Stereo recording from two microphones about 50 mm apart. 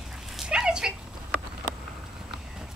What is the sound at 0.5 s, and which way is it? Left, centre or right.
Dog, centre.